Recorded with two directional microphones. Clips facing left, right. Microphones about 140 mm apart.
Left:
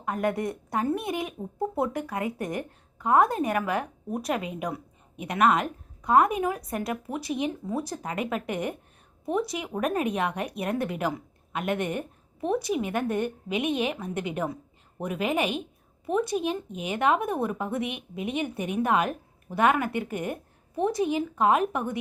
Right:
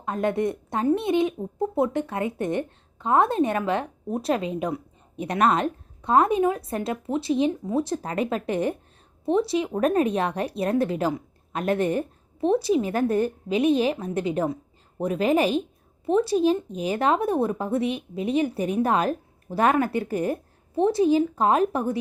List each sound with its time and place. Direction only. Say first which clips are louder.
0.0 s a woman's voice: right 3 dB; 25° right (ahead or behind)